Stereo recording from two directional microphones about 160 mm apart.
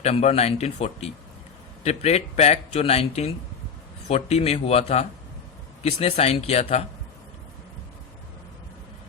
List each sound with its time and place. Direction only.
0.0 s speech: 40° left (ahead or behind)